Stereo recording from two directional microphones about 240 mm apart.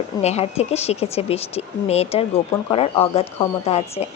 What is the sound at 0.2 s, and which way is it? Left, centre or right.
A woman's voice, left.